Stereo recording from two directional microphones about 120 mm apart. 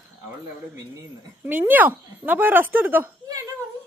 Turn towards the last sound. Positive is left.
turn(degrees=-15)  # may be behind; listen again after turning